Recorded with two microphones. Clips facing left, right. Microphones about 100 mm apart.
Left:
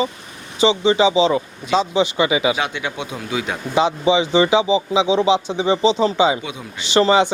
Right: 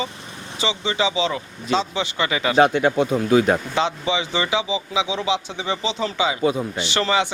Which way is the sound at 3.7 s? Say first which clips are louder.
Left 6 dB; 15° left (ahead or behind).